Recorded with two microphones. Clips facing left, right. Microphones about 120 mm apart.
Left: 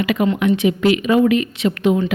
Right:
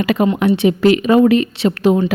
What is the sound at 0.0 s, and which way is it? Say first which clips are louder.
Speech: right 2 dB; 35° right (ahead or behind).